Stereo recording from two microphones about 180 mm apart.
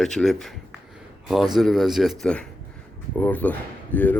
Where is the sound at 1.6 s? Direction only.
Centre (ahead or behind).